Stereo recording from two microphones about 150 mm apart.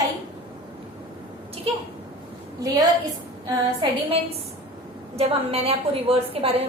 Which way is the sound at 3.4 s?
30° right (ahead or behind).